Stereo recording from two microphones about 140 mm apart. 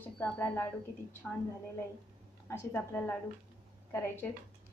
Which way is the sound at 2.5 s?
10° left (ahead or behind).